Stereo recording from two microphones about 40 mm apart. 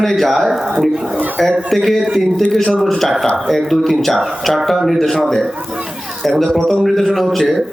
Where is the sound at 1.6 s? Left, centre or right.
Centre.